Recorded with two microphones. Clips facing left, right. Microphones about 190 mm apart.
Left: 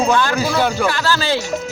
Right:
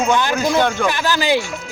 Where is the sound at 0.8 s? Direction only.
15° right (ahead or behind).